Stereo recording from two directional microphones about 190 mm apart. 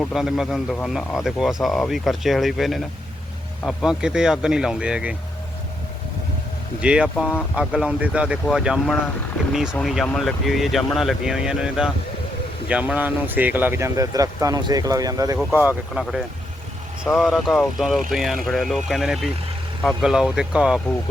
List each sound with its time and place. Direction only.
0.0 s speech: centre (ahead or behind)
6.8 s speech: 5° right (ahead or behind)
15.6 s speech: 5° right (ahead or behind)